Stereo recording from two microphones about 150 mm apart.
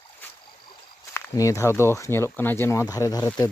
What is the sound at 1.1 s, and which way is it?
Speech, 20° left (ahead or behind).